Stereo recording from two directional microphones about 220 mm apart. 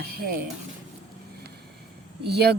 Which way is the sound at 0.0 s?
45° right (ahead or behind).